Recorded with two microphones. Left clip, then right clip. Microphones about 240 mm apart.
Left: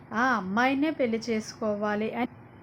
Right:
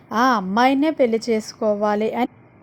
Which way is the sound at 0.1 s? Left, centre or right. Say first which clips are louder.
Right 8 dB; right.